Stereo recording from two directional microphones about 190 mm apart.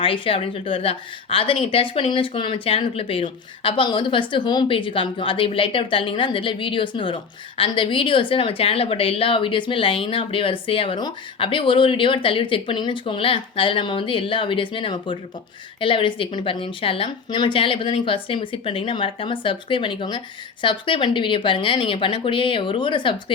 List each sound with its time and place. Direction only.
0.0 s a woman's voice: 30° left (ahead or behind)